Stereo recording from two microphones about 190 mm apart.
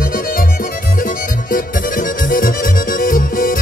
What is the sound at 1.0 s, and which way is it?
Music, 45° left (ahead or behind).